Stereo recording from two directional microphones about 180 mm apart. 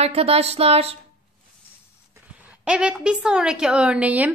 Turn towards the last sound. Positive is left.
turn(degrees=-10)  # may be behind; listen again after turning